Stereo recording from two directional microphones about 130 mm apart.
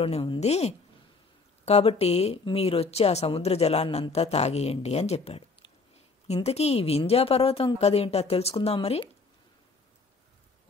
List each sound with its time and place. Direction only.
0.0 s a woman's voice: 45° left (ahead or behind)